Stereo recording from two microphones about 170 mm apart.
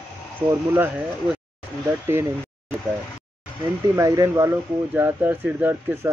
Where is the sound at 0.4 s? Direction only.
10° right (ahead or behind).